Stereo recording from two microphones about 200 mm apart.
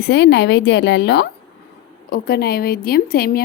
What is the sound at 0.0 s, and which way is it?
A woman's voice, 55° left (ahead or behind).